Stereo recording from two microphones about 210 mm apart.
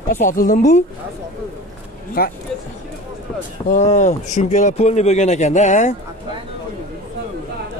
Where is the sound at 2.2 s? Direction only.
45° left (ahead or behind).